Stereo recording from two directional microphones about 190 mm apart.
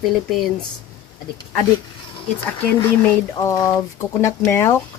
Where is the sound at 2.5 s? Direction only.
15° left (ahead or behind).